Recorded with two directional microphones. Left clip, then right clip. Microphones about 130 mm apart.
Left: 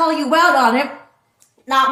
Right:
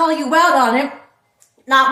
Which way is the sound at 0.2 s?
20° left (ahead or behind).